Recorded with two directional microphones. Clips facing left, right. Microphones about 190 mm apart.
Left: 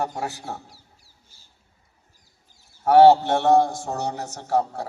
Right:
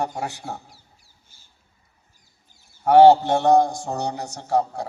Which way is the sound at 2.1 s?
35° left (ahead or behind).